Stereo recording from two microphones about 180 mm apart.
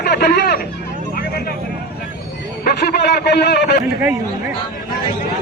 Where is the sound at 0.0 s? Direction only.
65° left (ahead or behind).